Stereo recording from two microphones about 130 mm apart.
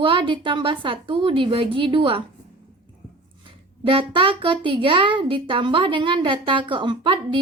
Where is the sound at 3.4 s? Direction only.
40° right (ahead or behind).